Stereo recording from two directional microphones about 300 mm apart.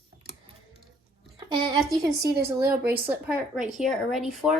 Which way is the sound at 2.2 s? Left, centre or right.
Right.